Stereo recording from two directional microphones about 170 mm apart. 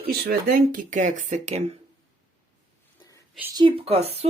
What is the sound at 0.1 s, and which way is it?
Speech, 65° right (ahead or behind).